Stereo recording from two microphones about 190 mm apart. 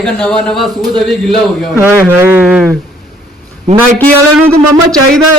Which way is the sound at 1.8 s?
10° right (ahead or behind).